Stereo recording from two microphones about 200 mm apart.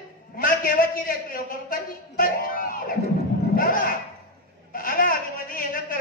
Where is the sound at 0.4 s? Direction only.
45° left (ahead or behind).